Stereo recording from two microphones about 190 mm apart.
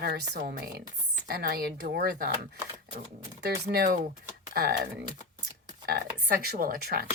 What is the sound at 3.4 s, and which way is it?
Speech, 55° right (ahead or behind).